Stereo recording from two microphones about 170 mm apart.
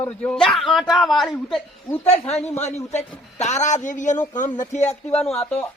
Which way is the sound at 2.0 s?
40° left (ahead or behind).